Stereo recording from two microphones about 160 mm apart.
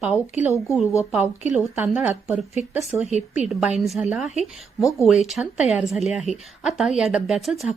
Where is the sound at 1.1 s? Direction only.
10° right (ahead or behind).